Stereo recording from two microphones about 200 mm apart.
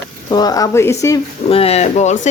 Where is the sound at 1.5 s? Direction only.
30° left (ahead or behind).